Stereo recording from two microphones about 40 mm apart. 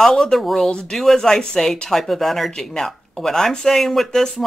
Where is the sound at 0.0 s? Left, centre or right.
Centre.